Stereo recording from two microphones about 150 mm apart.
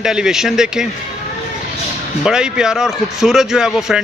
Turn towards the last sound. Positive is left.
turn(degrees=-5)  # may be behind; listen again after turning